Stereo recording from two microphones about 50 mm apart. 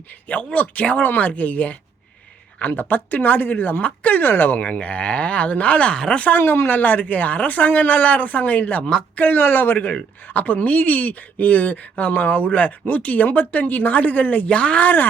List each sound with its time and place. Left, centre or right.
0.3 s a woman's voice: left
4.2 s speech: left
4.5 s speech: left
5.9 s speech: centre
6.1 s speech: left
6.4 s a woman's voice: left